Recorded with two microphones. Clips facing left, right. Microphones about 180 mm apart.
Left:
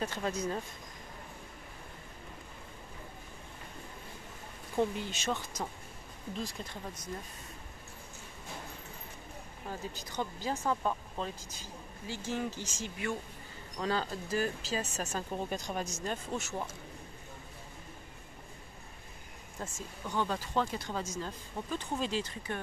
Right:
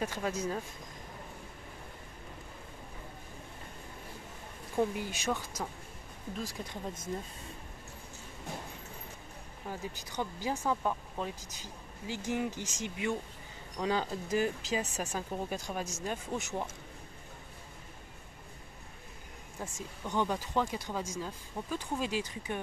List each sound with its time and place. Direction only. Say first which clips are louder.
0.0 s speech: even; 10° right (ahead or behind)
4.7 s speech: even; 10° right (ahead or behind)
6.6 s speech: right 3 dB; 20° right (ahead or behind)
9.7 s speech: right 1 dB; 15° right (ahead or behind)
19.6 s speech: right 1 dB; 15° right (ahead or behind)